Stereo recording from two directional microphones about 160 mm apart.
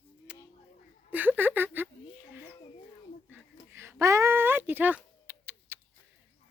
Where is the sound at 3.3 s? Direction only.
15° right (ahead or behind).